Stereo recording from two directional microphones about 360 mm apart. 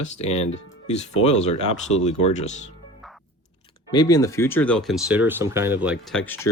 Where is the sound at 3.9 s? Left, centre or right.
Centre.